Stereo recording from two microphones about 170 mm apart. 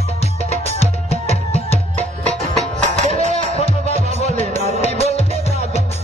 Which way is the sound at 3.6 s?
35° left (ahead or behind).